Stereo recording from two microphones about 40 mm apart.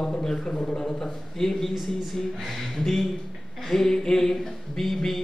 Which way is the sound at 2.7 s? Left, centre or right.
Centre.